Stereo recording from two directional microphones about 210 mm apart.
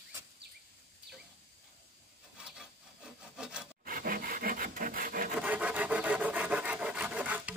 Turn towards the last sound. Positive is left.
turn(degrees=-5)  # may be behind; listen again after turning